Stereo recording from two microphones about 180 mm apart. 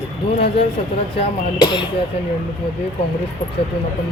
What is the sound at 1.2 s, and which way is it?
Speech, 25° left (ahead or behind).